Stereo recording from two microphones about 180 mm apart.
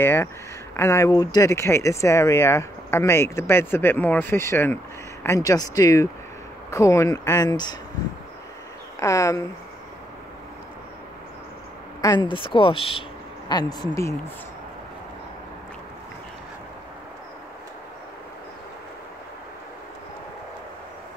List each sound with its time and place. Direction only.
0.0 s speech: 15° left (ahead or behind)
9.0 s speech: 20° left (ahead or behind)
12.0 s speech: 25° left (ahead or behind)